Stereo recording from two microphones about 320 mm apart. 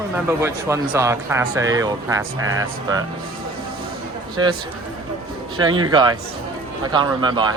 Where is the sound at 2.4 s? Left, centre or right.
Right.